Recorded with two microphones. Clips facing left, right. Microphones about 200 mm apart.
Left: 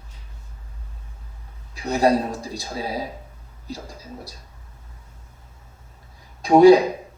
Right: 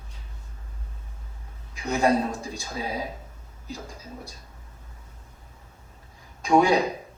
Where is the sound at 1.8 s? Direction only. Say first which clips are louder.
Left 3 dB; 35° left (ahead or behind).